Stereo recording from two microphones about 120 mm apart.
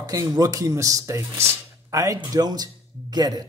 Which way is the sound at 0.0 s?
30° right (ahead or behind).